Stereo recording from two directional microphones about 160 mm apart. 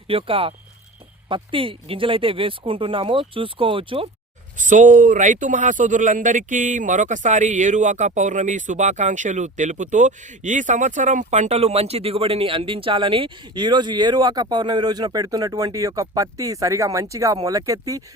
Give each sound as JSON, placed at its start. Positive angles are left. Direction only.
{"t": 0.1, "sound": "speech", "side_deg": -35}
{"t": 4.5, "sound": "speech", "side_deg": -55}